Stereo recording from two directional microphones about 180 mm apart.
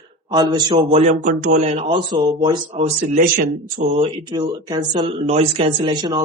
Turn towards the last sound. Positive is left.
turn(degrees=-25)  # may be behind; listen again after turning